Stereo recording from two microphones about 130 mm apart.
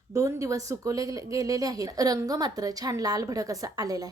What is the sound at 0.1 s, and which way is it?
Speech, 25° right (ahead or behind).